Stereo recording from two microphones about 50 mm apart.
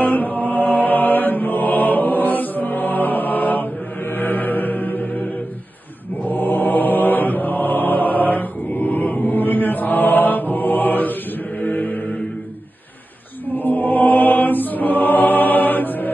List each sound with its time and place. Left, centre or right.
0.0 s mantra: left
4.1 s music: left
6.2 s mantra: left
11.7 s a sound: left
13.6 s mantra: left